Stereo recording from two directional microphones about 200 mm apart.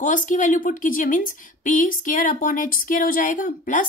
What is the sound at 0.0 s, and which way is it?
A woman's voice, 40° left (ahead or behind).